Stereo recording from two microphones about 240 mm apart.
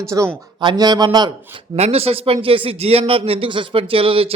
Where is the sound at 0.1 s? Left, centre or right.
Centre.